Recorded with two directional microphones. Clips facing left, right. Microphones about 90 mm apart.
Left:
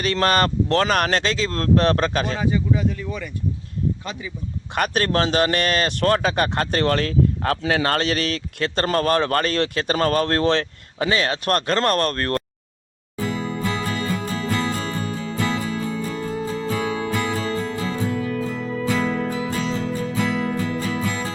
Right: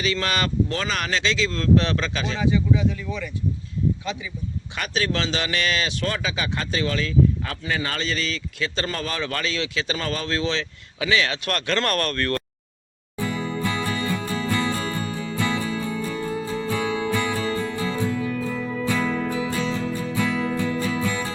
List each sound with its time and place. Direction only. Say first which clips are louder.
0.0 s speech: left 5 dB; 50° left (ahead or behind)
4.7 s speech: left 5 dB; 55° left (ahead or behind); by 12.4 s 35° left (ahead or behind)
13.2 s music: left 1 dB; 20° left (ahead or behind)